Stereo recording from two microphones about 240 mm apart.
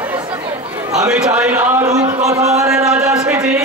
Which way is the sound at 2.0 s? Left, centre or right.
Right.